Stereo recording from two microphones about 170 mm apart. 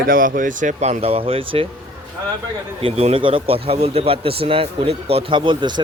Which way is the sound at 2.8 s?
35° right (ahead or behind).